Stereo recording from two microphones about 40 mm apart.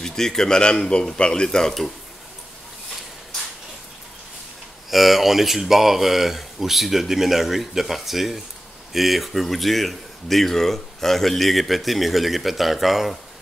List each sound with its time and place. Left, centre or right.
0.0 s a man's voice: centre
4.9 s speech: centre